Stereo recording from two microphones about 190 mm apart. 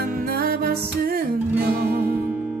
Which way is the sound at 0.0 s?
55° right (ahead or behind).